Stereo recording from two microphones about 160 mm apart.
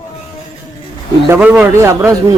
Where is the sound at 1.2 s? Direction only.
15° right (ahead or behind).